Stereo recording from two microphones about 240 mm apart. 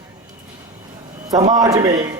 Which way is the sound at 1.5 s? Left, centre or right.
Centre.